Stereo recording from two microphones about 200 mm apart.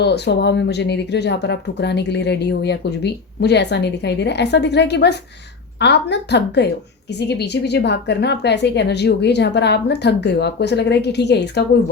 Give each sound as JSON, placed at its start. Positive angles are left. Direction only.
{"t": 0.0, "sound": "speech", "side_deg": 55}